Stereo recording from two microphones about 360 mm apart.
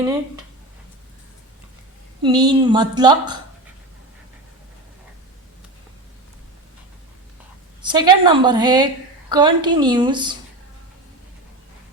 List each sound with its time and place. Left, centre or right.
2.2 s a woman's voice: centre
7.8 s a woman's voice: centre